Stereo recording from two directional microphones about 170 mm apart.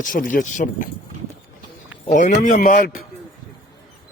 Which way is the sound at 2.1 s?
45° left (ahead or behind).